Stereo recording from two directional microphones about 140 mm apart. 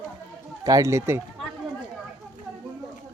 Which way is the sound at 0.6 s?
25° right (ahead or behind).